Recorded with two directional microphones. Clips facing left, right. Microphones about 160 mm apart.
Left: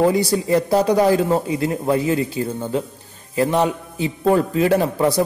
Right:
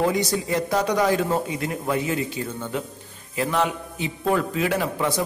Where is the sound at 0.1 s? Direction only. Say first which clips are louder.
Left 6 dB; 30° left (ahead or behind).